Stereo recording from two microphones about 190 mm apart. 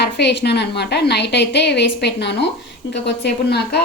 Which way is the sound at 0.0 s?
65° left (ahead or behind).